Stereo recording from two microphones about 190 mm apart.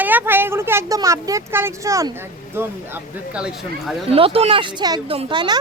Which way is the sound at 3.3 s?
5° right (ahead or behind).